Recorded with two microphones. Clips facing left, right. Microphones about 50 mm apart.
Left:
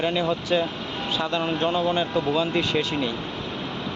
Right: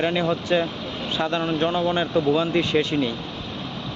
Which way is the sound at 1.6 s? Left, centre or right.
Centre.